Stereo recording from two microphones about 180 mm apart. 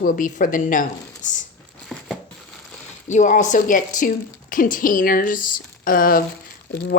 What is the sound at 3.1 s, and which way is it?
Speech, 40° left (ahead or behind).